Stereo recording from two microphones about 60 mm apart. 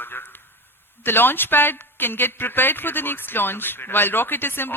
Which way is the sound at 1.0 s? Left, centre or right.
Left.